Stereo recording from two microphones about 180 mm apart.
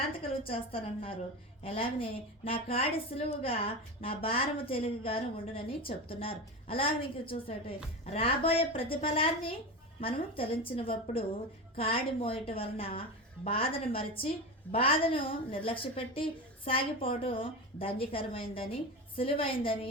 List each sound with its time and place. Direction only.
0.2 s a woman's voice: 30° left (ahead or behind)